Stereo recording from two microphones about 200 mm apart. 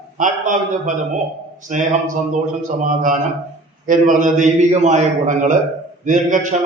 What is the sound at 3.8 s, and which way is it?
A man's voice, 40° right (ahead or behind).